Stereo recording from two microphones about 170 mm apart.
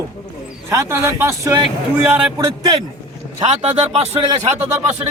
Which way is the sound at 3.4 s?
40° right (ahead or behind).